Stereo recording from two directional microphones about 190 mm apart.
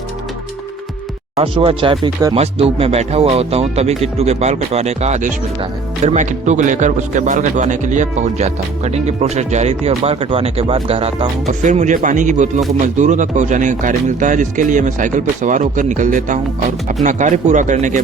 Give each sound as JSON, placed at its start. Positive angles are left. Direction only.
{"t": 1.4, "sound": "speech", "side_deg": -30}